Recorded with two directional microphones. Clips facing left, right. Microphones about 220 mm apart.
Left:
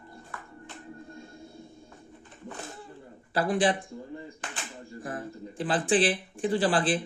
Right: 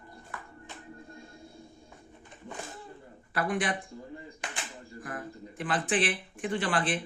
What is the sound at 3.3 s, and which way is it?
Speech, 30° left (ahead or behind).